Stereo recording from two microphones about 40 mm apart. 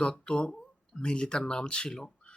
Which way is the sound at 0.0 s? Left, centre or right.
Left.